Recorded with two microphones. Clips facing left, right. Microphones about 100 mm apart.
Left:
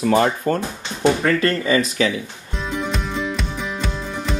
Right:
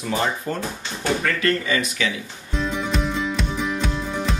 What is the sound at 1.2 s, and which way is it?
Speech, 35° left (ahead or behind).